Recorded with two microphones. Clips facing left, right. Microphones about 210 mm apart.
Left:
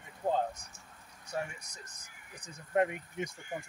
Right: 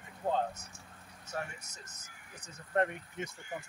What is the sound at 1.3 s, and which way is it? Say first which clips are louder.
Speech: left 3 dB; 15° left (ahead or behind).